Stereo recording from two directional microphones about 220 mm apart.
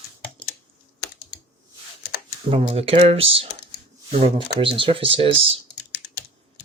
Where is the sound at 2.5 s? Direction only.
25° right (ahead or behind).